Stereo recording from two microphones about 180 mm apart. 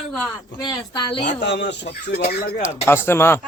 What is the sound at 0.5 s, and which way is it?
Speech, 25° left (ahead or behind).